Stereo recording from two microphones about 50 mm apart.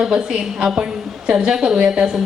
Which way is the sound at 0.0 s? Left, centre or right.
Centre.